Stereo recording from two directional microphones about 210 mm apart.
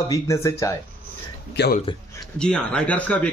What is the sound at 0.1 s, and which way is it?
Speech, 15° left (ahead or behind).